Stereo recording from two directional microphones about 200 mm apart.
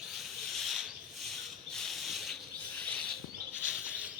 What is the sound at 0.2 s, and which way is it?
Rub, centre (ahead or behind).